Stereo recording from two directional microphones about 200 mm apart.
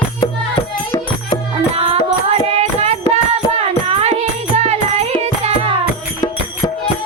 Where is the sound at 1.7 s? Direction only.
30° right (ahead or behind).